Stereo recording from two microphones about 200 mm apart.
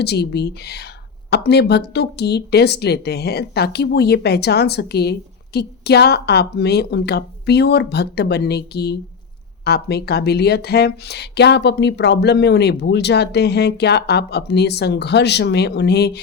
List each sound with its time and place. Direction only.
0.0 s speech: 55° left (ahead or behind)